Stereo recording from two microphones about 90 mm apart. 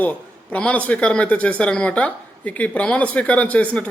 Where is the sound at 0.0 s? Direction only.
15° left (ahead or behind).